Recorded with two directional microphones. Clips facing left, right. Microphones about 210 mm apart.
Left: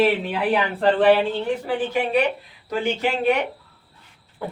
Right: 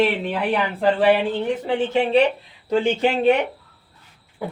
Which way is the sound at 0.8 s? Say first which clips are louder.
Left 1 dB; 10° right (ahead or behind).